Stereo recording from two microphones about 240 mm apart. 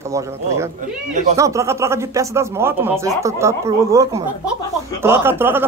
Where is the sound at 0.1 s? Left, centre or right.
Centre.